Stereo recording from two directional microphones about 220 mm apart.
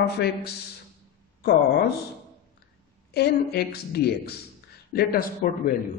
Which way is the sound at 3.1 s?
45° left (ahead or behind).